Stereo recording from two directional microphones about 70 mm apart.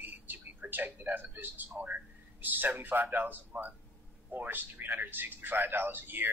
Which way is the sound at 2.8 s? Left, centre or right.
Right.